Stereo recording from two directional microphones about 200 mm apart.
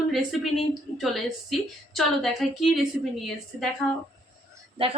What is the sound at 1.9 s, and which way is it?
A woman's voice, centre (ahead or behind).